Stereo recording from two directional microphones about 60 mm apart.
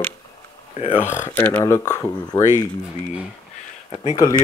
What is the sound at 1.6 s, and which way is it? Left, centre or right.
Speech, left.